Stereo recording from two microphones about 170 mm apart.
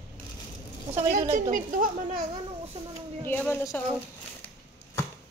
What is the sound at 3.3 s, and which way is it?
Speech, 10° left (ahead or behind).